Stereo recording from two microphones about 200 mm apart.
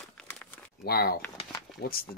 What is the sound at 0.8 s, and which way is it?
Speech, 50° left (ahead or behind).